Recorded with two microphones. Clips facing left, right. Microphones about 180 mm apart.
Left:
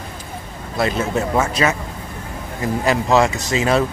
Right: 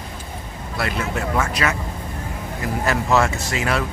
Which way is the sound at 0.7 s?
25° left (ahead or behind).